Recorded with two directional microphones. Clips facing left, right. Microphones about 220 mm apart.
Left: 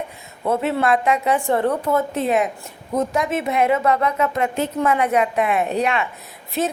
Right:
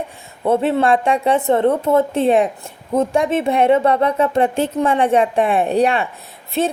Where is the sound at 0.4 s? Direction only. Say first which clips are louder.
Right 4 dB; 30° right (ahead or behind).